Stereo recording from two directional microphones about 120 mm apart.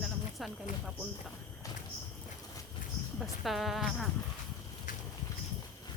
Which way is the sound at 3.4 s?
Centre (ahead or behind).